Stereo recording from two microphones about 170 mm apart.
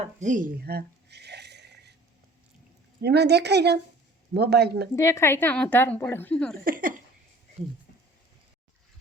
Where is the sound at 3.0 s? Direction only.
75° right (ahead or behind).